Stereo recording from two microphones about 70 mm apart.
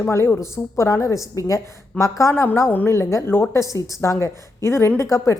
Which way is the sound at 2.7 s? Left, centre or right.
Left.